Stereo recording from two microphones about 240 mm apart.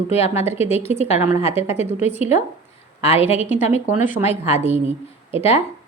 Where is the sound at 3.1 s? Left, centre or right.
Left.